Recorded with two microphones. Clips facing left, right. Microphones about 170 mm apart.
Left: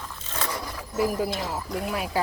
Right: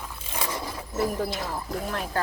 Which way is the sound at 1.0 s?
5° left (ahead or behind).